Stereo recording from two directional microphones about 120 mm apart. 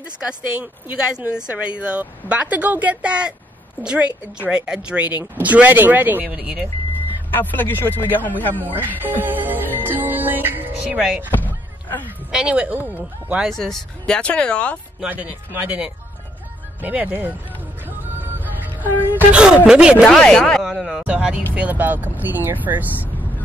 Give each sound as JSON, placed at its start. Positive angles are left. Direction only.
{"t": 0.3, "sound": "speech", "side_deg": -10}
{"t": 7.3, "sound": "speech", "side_deg": 15}
{"t": 9.0, "sound": "speech", "side_deg": -15}
{"t": 9.8, "sound": "music", "side_deg": -15}
{"t": 11.3, "sound": "a sound", "side_deg": 15}
{"t": 12.3, "sound": "speech", "side_deg": -5}
{"t": 13.5, "sound": "speech", "side_deg": 0}
{"t": 15.0, "sound": "speech", "side_deg": -15}
{"t": 17.8, "sound": "music", "side_deg": -15}
{"t": 19.0, "sound": "speech", "side_deg": -10}
{"t": 20.1, "sound": "speech", "side_deg": 5}
{"t": 21.0, "sound": "speech", "side_deg": -10}